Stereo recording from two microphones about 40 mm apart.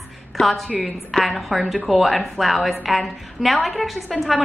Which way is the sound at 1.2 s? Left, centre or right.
Centre.